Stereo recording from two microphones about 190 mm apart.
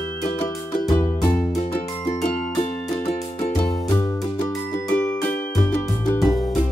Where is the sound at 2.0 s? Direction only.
35° left (ahead or behind).